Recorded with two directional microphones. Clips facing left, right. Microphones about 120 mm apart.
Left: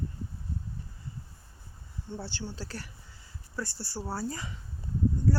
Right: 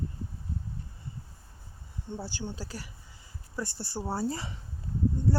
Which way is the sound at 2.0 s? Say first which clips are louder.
Right 1 dB; 15° right (ahead or behind).